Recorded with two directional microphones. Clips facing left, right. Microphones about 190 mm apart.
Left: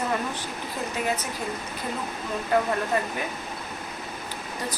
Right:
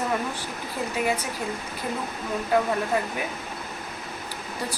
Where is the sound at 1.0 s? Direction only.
10° right (ahead or behind).